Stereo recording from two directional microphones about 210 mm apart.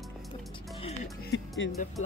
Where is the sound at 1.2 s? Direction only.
55° left (ahead or behind).